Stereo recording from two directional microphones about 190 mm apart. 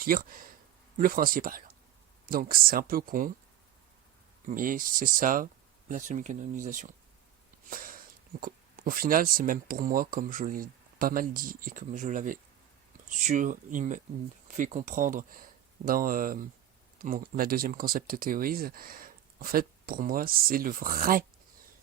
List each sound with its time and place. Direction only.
0.0 s speech: 50° right (ahead or behind)
4.4 s speech: 45° right (ahead or behind)